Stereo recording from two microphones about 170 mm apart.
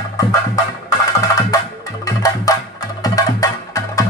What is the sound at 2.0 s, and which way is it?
Music, 20° left (ahead or behind).